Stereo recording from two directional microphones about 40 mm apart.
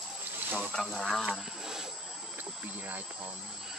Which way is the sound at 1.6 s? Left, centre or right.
Centre.